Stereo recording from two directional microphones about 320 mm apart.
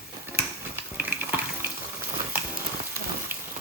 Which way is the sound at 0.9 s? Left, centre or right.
Centre.